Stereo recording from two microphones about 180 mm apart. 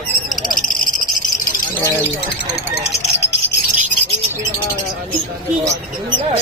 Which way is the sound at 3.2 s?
70° left (ahead or behind).